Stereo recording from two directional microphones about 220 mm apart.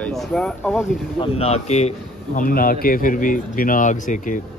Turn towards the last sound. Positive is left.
turn(degrees=35)  # may be behind; listen again after turning